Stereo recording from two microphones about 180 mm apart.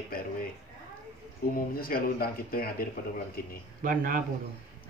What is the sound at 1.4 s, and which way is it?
Speech, 55° left (ahead or behind).